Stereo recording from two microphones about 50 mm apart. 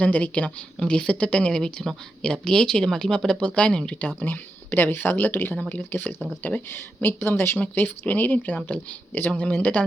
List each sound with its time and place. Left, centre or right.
0.0 s speech: left
0.8 s speech: centre
4.2 s speech: left
5.5 s speech: left
6.1 s speech: centre
6.7 s speech: left
7.8 s speech: left